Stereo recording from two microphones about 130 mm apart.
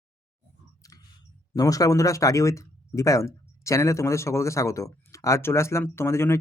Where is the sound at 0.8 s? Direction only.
25° left (ahead or behind).